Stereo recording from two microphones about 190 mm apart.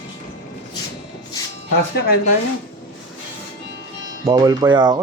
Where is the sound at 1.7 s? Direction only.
55° left (ahead or behind).